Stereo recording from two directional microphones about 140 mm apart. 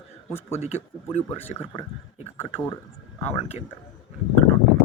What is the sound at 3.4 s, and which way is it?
Speech, 45° left (ahead or behind).